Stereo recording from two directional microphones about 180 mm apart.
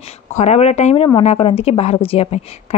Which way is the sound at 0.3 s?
40° left (ahead or behind).